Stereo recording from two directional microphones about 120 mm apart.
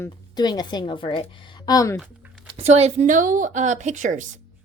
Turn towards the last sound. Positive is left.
turn(degrees=-90)